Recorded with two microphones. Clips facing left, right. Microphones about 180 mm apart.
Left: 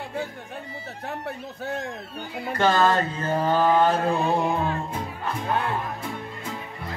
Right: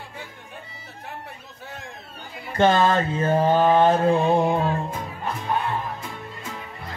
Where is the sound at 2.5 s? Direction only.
25° right (ahead or behind).